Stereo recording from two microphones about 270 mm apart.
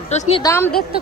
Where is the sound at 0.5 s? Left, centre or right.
Centre.